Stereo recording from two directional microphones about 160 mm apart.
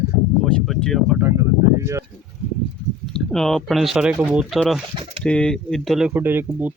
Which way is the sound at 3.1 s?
Centre (ahead or behind).